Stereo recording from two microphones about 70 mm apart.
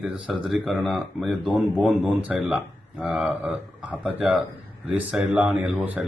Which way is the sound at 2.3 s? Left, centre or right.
Centre.